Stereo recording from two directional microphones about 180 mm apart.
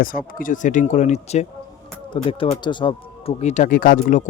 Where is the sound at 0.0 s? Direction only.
50° left (ahead or behind).